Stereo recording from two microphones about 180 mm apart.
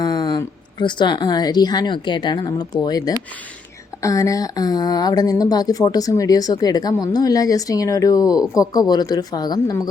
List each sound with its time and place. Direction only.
0.0 s a woman's voice: 20° left (ahead or behind)